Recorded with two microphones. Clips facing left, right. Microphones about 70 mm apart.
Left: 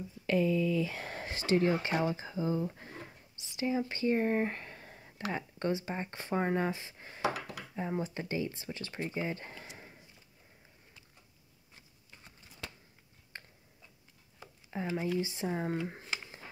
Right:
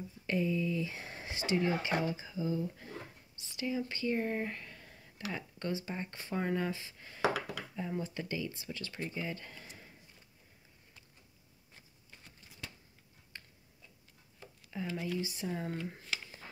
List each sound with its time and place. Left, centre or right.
0.3 s speech: left
1.3 s speech: left
3.3 s speech: left
13.3 s tick-tock: left
14.7 s a sound: left
15.1 s speech: left
15.9 s a sound: left